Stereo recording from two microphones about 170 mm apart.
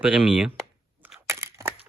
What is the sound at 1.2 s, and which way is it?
Crushing, 15° right (ahead or behind).